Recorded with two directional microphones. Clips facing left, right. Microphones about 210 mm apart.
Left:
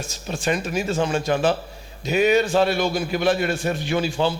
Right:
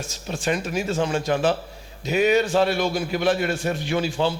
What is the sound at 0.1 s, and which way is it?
A man's voice, 15° left (ahead or behind).